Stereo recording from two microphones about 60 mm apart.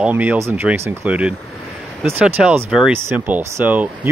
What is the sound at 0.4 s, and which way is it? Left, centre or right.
Speech, right.